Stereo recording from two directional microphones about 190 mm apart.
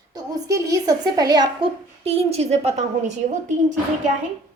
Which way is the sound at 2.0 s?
30° right (ahead or behind).